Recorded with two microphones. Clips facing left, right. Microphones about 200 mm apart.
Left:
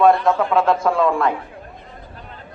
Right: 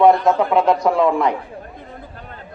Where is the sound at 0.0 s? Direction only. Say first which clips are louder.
Right 2 dB; 20° right (ahead or behind).